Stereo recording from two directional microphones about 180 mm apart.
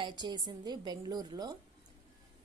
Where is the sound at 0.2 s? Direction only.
25° right (ahead or behind).